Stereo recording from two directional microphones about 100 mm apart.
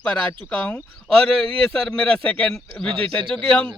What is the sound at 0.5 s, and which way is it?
A man's voice, 10° left (ahead or behind).